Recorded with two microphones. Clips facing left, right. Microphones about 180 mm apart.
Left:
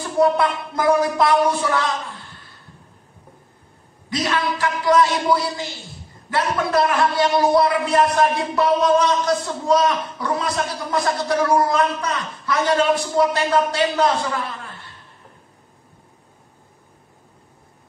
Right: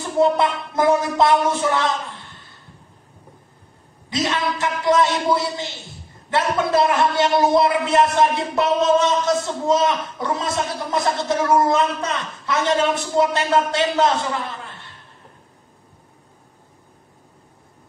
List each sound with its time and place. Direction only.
0.2 s a man's voice: 25° right (ahead or behind)
4.1 s a man's voice: 25° right (ahead or behind)